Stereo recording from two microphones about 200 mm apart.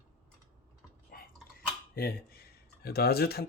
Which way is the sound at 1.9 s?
50° left (ahead or behind).